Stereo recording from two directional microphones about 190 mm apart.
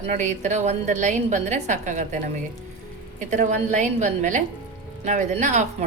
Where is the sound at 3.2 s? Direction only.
40° right (ahead or behind).